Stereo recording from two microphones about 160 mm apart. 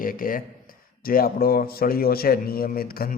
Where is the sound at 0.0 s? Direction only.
60° left (ahead or behind).